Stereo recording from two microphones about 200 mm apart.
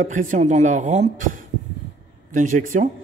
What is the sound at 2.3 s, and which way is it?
Speech, 40° right (ahead or behind).